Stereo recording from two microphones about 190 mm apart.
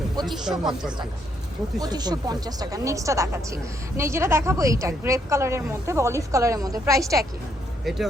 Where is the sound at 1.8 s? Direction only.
20° right (ahead or behind).